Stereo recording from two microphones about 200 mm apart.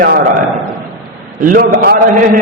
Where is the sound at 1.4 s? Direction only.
45° right (ahead or behind).